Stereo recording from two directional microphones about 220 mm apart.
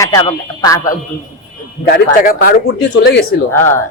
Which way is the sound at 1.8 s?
40° left (ahead or behind).